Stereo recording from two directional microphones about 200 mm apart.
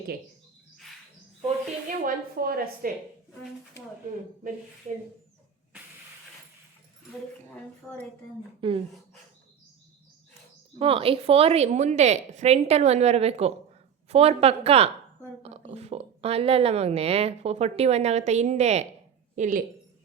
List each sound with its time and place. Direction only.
2.0 s a woman's voice: 50° right (ahead or behind)
8.6 s a woman's voice: 25° right (ahead or behind)
10.8 s a woman's voice: 30° right (ahead or behind)